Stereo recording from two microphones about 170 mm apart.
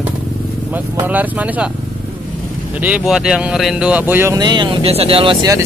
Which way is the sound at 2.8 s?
10° right (ahead or behind).